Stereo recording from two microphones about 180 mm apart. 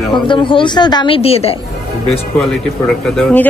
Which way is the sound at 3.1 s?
5° left (ahead or behind).